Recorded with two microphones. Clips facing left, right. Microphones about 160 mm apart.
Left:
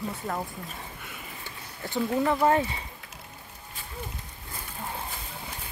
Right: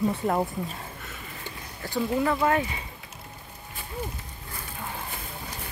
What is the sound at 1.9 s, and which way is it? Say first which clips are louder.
Speech: even; 15° left (ahead or behind).